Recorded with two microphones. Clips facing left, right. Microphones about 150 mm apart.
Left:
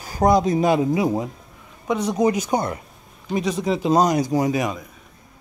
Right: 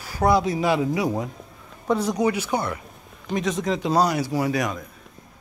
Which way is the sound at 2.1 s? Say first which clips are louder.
Left 3 dB; 35° left (ahead or behind).